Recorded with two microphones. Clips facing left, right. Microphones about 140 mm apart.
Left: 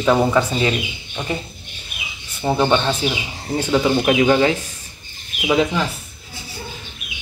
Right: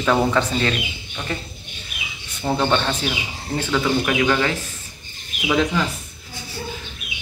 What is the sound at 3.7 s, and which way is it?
Speech, 25° left (ahead or behind).